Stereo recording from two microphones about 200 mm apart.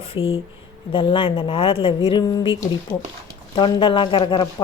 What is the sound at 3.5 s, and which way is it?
Speech, 20° left (ahead or behind).